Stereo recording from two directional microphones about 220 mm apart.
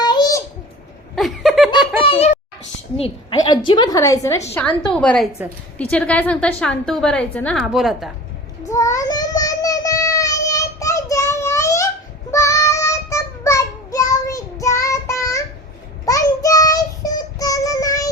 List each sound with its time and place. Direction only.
0.0 s babbling: 20° left (ahead or behind)
1.1 s snicker: centre (ahead or behind)
2.0 s a child's voice: 25° left (ahead or behind); by 8.1 s centre (ahead or behind)
8.7 s child singing: 15° left (ahead or behind)